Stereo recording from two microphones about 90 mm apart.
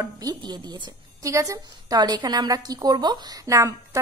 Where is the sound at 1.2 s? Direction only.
35° right (ahead or behind).